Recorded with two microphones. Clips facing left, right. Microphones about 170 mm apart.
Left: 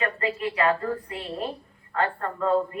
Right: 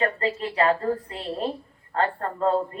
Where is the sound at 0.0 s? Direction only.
35° right (ahead or behind).